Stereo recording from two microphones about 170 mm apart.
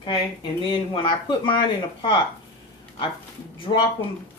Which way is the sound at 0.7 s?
30° left (ahead or behind).